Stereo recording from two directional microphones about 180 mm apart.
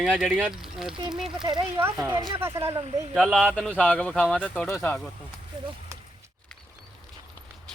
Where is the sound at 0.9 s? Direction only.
25° right (ahead or behind).